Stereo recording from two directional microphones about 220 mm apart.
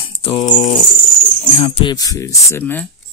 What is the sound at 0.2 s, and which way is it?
Speech, 25° left (ahead or behind).